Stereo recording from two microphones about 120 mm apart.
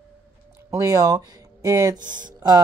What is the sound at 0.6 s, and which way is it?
Speech, 30° right (ahead or behind).